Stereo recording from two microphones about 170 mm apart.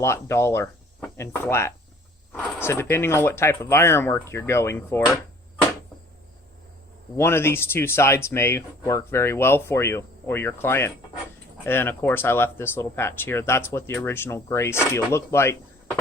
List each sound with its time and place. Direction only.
0.0 s speech: 15° left (ahead or behind)
7.2 s speech: 15° left (ahead or behind)